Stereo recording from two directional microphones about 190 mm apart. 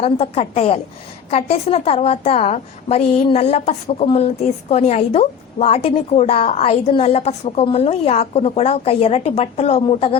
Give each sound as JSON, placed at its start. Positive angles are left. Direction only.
{"t": 0.0, "sound": "a woman's voice", "side_deg": 35}